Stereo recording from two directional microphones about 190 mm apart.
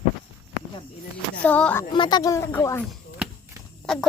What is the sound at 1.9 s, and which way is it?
Speech, 25° left (ahead or behind).